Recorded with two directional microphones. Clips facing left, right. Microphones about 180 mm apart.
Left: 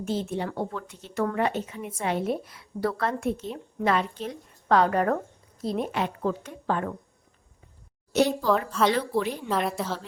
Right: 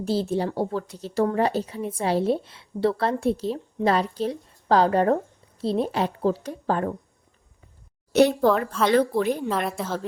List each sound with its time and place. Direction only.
0.0 s a woman's voice: 35° right (ahead or behind)
8.1 s a woman's voice: 60° right (ahead or behind)
8.4 s a woman's voice: centre (ahead or behind)
8.9 s a woman's voice: 45° right (ahead or behind)
9.5 s a woman's voice: centre (ahead or behind)